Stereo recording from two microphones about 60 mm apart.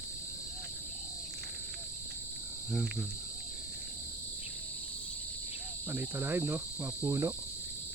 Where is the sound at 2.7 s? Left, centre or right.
Centre.